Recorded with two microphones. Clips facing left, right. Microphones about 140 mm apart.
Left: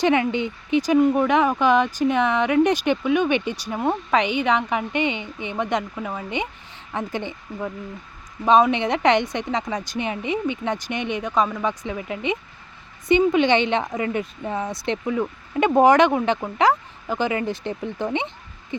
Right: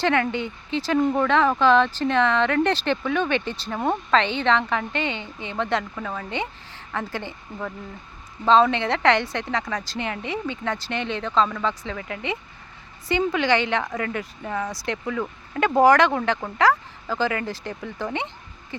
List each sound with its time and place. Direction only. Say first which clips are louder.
0.0 s a woman's voice: left 3 dB; 15° left (ahead or behind)